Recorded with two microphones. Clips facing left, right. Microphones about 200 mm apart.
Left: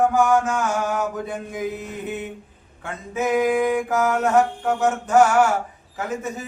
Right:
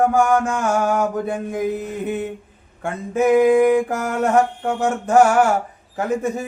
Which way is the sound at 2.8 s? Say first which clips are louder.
Right 6 dB; 55° right (ahead or behind).